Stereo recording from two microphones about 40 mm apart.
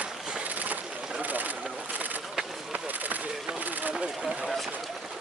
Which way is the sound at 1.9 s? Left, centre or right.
Right.